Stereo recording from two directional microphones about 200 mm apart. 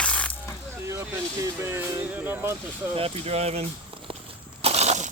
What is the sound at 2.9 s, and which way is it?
Speech, 30° right (ahead or behind).